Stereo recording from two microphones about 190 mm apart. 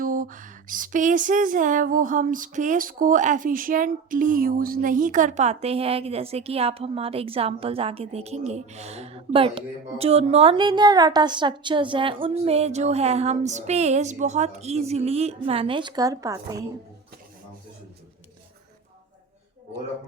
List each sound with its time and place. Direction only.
0.0 s speech: 45° right (ahead or behind); by 16.6 s 15° right (ahead or behind)